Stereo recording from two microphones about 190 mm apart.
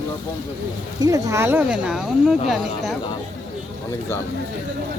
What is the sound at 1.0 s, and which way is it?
Speech, 15° right (ahead or behind).